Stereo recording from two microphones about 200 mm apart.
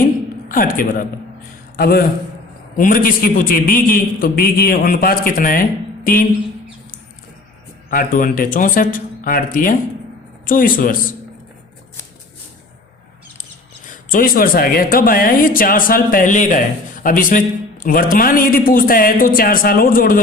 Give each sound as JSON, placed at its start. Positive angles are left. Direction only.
{"t": 0.0, "sound": "a sound", "side_deg": 45}
{"t": 1.7, "sound": "a man's voice", "side_deg": 50}
{"t": 7.9, "sound": "speech", "side_deg": 40}
{"t": 13.8, "sound": "speech", "side_deg": 45}